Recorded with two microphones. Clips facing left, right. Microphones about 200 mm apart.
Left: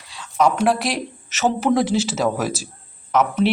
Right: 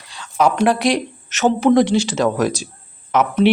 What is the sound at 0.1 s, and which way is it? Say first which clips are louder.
Speech: right 1 dB; centre (ahead or behind).